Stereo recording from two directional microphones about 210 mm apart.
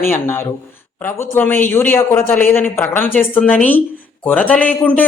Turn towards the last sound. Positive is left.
turn(degrees=5)  # may be behind; listen again after turning